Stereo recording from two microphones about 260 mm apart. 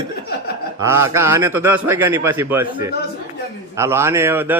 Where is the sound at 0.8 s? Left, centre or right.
Centre.